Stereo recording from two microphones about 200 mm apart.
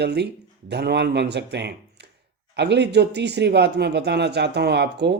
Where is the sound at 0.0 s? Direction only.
55° right (ahead or behind).